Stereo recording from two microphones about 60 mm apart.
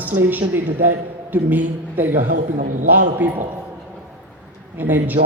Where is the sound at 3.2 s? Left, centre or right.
Right.